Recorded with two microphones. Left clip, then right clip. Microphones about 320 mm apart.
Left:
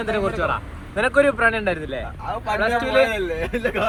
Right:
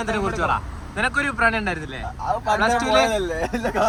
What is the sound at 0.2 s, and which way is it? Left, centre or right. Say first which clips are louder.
A man's voice: even; centre.